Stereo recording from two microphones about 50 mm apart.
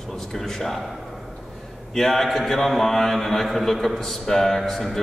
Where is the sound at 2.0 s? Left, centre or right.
Centre.